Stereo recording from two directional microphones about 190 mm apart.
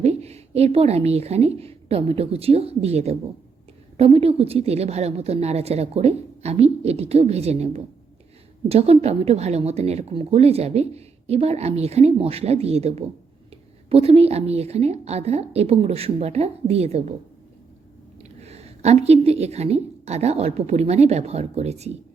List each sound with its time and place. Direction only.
0.0 s a woman's voice: 35° right (ahead or behind)
18.4 s a woman's voice: 35° right (ahead or behind)